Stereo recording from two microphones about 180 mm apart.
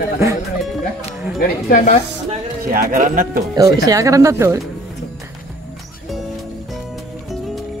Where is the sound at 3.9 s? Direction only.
20° right (ahead or behind).